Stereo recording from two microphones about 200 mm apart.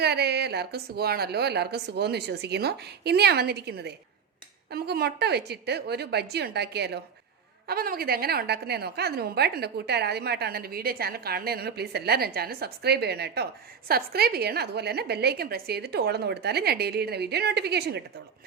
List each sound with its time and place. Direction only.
0.0 s a woman's voice: 55° right (ahead or behind)